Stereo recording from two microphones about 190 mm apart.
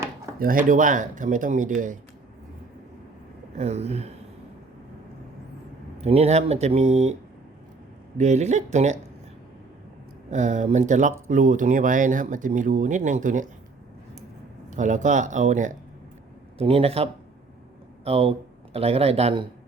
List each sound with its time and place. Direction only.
0.3 s speech: 45° right (ahead or behind)
3.6 s speech: 35° right (ahead or behind)
6.0 s speech: 35° right (ahead or behind)
8.2 s speech: 35° right (ahead or behind)
10.2 s speech: 40° right (ahead or behind)
14.7 s speech: 40° right (ahead or behind)
16.6 s a man's voice: 30° right (ahead or behind)